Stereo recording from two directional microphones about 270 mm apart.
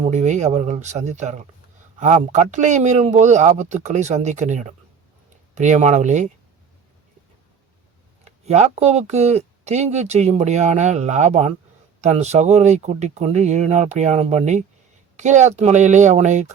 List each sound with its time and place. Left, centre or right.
0.0 s speech: right
8.4 s speech: right